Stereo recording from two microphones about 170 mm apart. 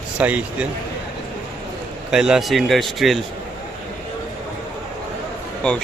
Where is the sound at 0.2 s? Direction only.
10° right (ahead or behind).